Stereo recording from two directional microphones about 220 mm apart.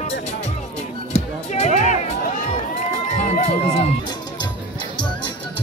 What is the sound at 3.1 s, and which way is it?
Music, 30° left (ahead or behind).